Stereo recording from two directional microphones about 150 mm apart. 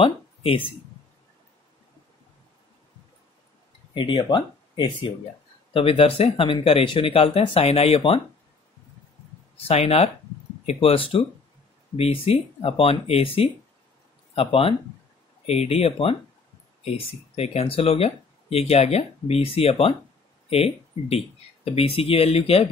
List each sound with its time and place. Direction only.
0.0 s speech: 35° left (ahead or behind)
3.9 s speech: 35° left (ahead or behind)
9.7 s speech: 40° left (ahead or behind)